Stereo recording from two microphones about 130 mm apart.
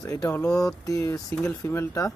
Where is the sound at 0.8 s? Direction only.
25° left (ahead or behind).